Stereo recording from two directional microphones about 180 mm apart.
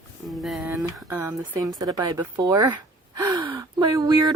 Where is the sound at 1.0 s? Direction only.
15° right (ahead or behind).